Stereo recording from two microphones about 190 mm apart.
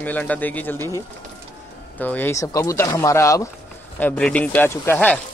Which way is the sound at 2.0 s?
10° left (ahead or behind).